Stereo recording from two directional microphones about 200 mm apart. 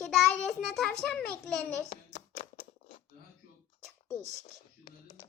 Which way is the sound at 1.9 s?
35° left (ahead or behind).